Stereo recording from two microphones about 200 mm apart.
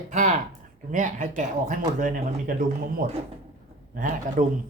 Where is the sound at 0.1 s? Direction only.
35° right (ahead or behind).